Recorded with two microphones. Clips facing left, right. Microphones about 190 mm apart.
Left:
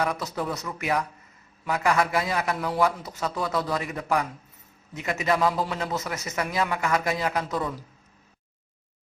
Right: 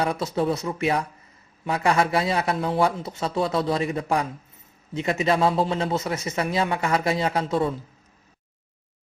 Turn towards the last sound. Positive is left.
turn(degrees=-25)  # may be behind; listen again after turning